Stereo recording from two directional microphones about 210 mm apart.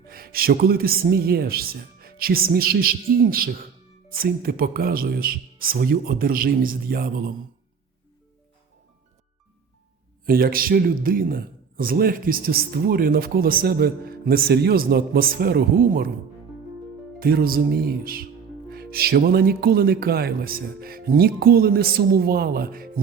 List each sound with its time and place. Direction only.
0.0 s a man's voice: 45° right (ahead or behind)
10.2 s a man's voice: 45° right (ahead or behind)
17.2 s a man's voice: 45° right (ahead or behind)